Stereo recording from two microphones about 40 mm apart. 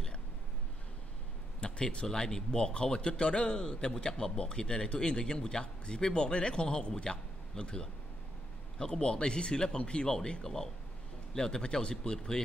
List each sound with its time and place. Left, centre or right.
1.6 s a man's voice: left